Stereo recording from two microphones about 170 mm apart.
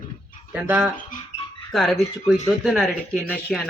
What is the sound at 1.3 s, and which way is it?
Dog, 40° left (ahead or behind).